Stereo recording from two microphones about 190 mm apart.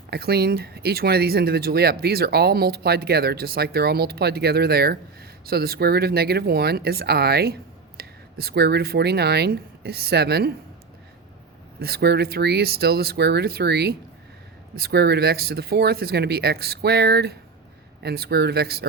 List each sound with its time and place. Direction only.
0.1 s speech: 55° right (ahead or behind)
11.8 s speech: 55° right (ahead or behind)